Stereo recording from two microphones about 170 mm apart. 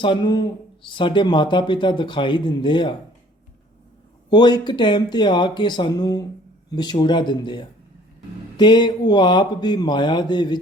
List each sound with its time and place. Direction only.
0.0 s speech: 25° left (ahead or behind)
4.3 s speech: 25° left (ahead or behind)